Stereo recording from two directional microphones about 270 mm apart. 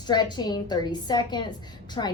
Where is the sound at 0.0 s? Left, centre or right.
Centre.